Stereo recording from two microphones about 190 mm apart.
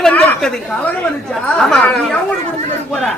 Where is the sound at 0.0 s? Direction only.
10° left (ahead or behind).